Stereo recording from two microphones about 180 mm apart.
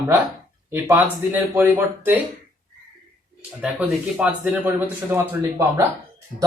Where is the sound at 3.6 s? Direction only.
5° right (ahead or behind).